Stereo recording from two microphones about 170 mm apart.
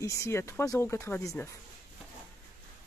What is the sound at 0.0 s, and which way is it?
Speech, 15° left (ahead or behind).